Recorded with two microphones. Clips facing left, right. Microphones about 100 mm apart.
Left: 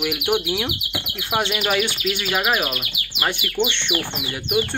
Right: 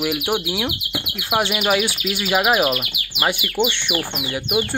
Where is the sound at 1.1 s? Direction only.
5° right (ahead or behind).